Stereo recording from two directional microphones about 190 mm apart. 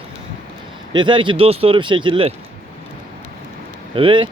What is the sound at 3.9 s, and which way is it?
Speech, 25° right (ahead or behind).